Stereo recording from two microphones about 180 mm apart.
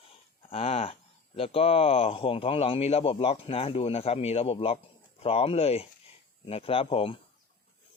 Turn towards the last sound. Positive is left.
turn(degrees=30)  # may be behind; listen again after turning